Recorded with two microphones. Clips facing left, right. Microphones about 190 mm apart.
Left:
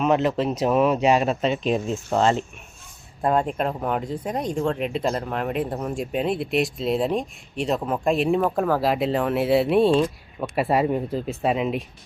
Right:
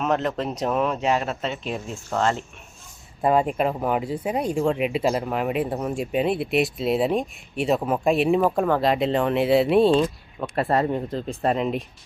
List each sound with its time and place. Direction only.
0.0 s speech: 5° left (ahead or behind); by 2.4 s 20° left (ahead or behind)
3.2 s speech: 5° right (ahead or behind)